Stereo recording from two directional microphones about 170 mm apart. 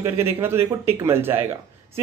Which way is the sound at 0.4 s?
15° right (ahead or behind).